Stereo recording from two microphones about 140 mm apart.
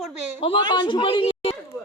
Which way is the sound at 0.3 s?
40° left (ahead or behind).